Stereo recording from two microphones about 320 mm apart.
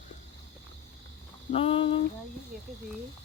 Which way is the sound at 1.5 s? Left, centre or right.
Centre.